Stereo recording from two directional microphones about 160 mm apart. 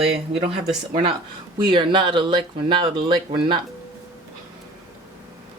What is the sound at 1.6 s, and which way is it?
Speech, 30° right (ahead or behind).